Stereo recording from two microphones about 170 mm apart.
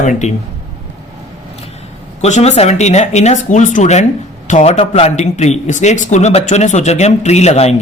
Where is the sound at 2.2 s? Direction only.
40° left (ahead or behind).